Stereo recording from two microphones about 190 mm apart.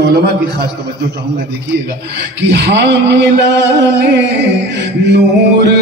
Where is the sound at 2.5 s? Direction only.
65° right (ahead or behind).